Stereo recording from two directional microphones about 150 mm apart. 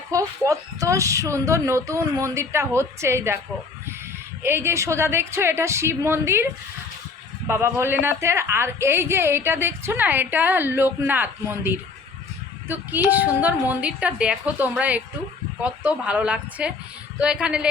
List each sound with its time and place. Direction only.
0.1 s speech: 20° right (ahead or behind)
4.4 s a woman's voice: 15° right (ahead or behind)